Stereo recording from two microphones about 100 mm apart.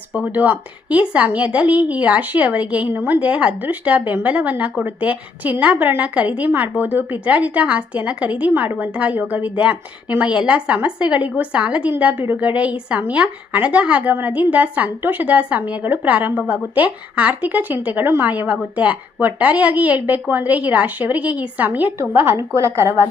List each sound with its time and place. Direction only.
0.1 s a woman's voice: 15° right (ahead or behind)